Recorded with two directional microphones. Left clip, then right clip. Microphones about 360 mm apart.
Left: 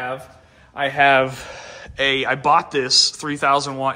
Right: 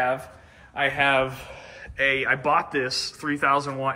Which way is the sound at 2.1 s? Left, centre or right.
Centre.